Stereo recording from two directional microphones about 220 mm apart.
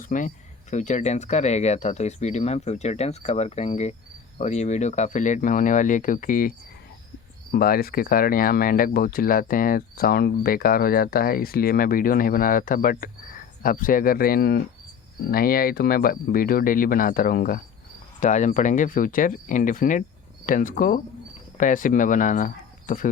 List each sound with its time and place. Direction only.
0.0 s speech: 35° left (ahead or behind)
7.5 s speech: 45° left (ahead or behind)